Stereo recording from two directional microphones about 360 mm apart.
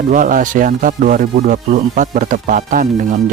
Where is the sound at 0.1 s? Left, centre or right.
Right.